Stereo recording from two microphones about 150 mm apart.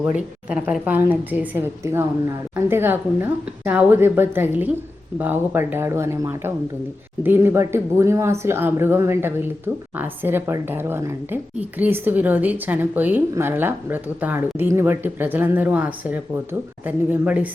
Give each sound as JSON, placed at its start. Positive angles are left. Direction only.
{"t": 0.0, "sound": "speech", "side_deg": -10}